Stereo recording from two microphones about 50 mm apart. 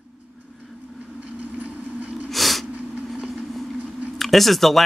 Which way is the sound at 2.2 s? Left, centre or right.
Centre.